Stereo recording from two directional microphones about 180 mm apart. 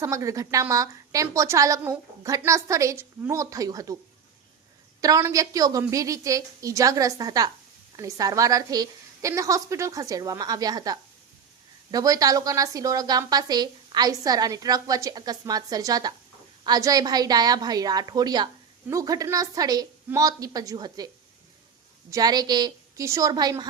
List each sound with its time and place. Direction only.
0.0 s a woman's voice: 15° right (ahead or behind)
4.9 s a woman's voice: 20° right (ahead or behind)
22.1 s a woman's voice: 20° right (ahead or behind)